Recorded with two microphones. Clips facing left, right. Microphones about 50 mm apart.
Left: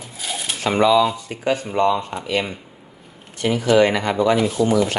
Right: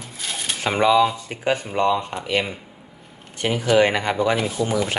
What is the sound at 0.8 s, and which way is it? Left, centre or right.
Speech, right.